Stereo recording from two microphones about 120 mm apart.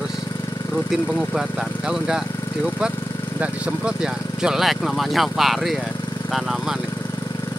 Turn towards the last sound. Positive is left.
turn(degrees=-5)  # may be behind; listen again after turning